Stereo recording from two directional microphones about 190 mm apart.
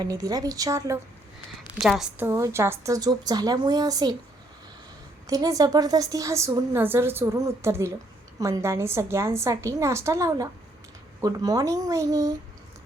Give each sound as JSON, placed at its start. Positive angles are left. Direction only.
{"t": 0.0, "sound": "a woman's voice", "side_deg": -20}
{"t": 1.8, "sound": "a woman's voice", "side_deg": 0}
{"t": 2.2, "sound": "a woman's voice", "side_deg": -15}
{"t": 5.2, "sound": "a woman's voice", "side_deg": -20}